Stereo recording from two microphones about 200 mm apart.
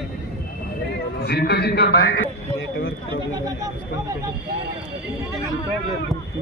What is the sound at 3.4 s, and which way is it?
Speech, 15° right (ahead or behind).